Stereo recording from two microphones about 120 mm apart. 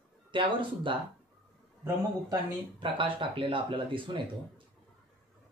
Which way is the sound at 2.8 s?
45° right (ahead or behind).